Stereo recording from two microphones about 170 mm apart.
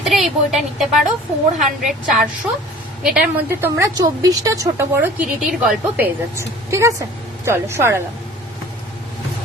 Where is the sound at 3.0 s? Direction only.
5° right (ahead or behind).